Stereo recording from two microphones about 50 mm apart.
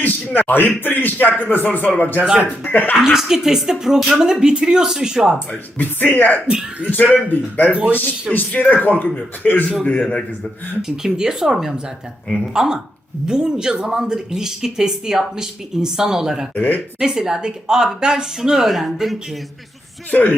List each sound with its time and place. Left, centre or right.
0.0 s a man's voice: left
3.0 s speech: centre
5.8 s a man's voice: left
7.7 s speech: right
8.3 s a man's voice: left
10.8 s speech: centre
16.6 s a man's voice: left
17.0 s speech: centre
20.1 s speech: left